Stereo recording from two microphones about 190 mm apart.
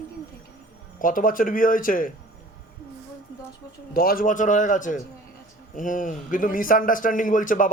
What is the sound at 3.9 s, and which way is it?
A man's voice, 50° left (ahead or behind).